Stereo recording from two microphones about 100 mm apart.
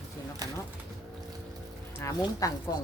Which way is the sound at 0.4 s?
40° right (ahead or behind).